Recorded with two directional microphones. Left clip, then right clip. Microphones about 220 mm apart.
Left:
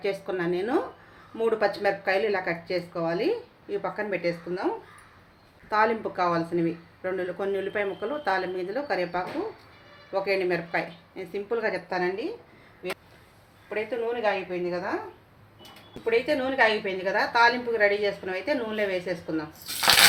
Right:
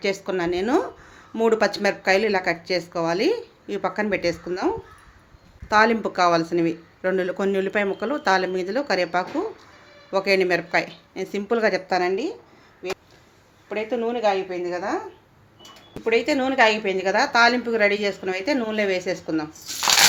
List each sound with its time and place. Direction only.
0.0 s speech: 45° right (ahead or behind)
13.7 s speech: 50° right (ahead or behind)
16.0 s speech: 50° right (ahead or behind)